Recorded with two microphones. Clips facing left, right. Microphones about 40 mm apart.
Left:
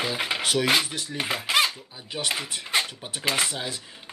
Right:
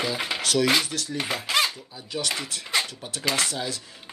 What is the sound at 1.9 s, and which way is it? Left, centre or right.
Speech, left.